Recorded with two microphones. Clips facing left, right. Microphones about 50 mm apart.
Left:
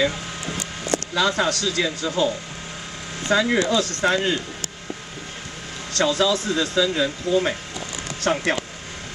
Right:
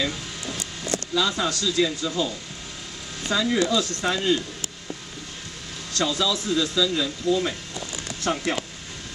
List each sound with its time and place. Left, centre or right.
1.1 s speech: left
3.3 s a man's voice: left
5.9 s a man's voice: left
8.2 s speech: left